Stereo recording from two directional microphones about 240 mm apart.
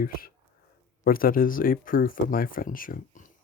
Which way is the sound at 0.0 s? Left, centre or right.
Left.